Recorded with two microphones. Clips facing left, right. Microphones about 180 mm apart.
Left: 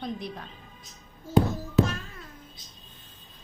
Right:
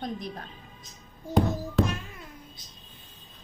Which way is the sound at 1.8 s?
Centre (ahead or behind).